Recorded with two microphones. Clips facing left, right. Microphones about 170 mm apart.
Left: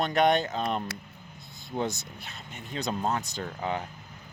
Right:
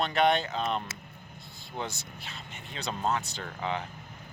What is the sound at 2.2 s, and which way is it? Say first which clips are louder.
Speech: left 1 dB; 45° left (ahead or behind).